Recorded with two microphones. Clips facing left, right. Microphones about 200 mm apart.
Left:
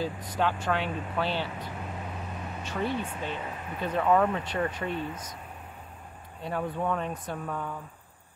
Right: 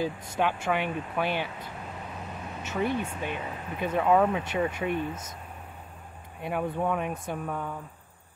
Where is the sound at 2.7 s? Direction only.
10° right (ahead or behind).